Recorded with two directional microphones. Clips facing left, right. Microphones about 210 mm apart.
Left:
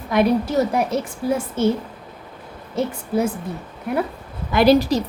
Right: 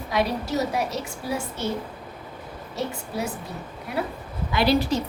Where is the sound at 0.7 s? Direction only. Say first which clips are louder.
Left 6 dB; 50° left (ahead or behind).